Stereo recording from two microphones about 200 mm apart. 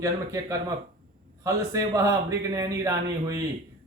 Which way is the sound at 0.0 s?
15° right (ahead or behind).